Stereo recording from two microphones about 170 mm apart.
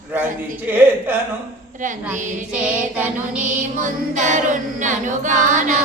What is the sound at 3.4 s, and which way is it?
A capella, 50° right (ahead or behind).